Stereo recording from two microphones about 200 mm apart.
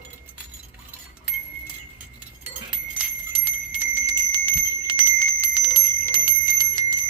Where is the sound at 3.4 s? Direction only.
10° right (ahead or behind).